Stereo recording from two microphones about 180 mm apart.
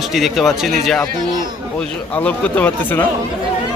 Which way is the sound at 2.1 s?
10° left (ahead or behind).